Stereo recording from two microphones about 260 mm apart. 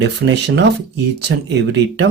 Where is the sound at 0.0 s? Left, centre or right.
Right.